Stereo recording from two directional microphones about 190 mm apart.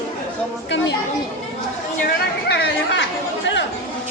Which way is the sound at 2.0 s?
60° left (ahead or behind).